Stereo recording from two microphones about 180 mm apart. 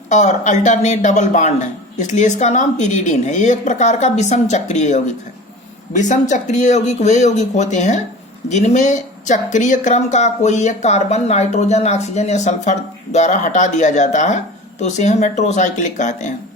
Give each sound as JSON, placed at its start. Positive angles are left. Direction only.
{"t": 0.1, "sound": "speech", "side_deg": 40}